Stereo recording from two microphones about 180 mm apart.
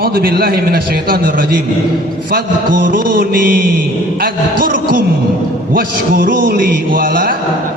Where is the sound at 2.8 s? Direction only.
50° right (ahead or behind).